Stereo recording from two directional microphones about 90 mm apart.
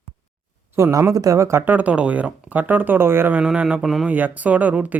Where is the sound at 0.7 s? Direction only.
30° right (ahead or behind).